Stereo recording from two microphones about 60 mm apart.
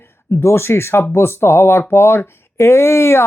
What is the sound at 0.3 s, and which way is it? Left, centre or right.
Speech, left.